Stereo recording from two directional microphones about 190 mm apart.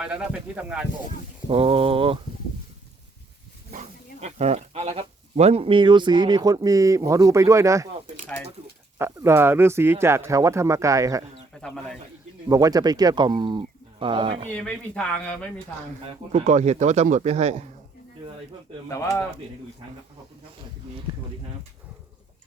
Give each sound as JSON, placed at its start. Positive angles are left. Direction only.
{"t": 0.0, "sound": "speech", "side_deg": -5}
{"t": 1.5, "sound": "speech", "side_deg": -30}
{"t": 3.7, "sound": "speech", "side_deg": -40}
{"t": 9.0, "sound": "speech", "side_deg": -15}
{"t": 11.6, "sound": "speech", "side_deg": 5}
{"t": 12.5, "sound": "speech", "side_deg": -20}
{"t": 14.5, "sound": "speech", "side_deg": 5}
{"t": 16.3, "sound": "speech", "side_deg": -35}
{"t": 18.9, "sound": "speech", "side_deg": 15}